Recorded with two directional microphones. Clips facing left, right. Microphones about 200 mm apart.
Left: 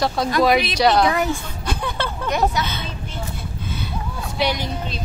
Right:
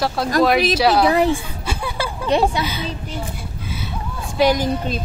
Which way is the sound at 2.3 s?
30° right (ahead or behind).